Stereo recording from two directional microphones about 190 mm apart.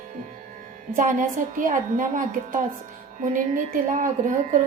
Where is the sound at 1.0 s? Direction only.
40° right (ahead or behind).